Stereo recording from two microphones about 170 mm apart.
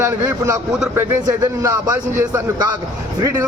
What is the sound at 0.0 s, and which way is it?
A man's voice, 15° right (ahead or behind).